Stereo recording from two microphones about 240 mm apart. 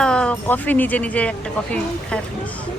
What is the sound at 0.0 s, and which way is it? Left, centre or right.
Speech, centre.